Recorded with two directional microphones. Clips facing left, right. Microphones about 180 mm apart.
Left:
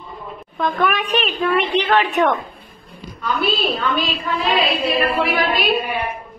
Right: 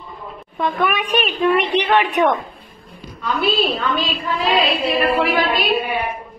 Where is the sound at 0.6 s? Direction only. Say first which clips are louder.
Even; 10° right (ahead or behind).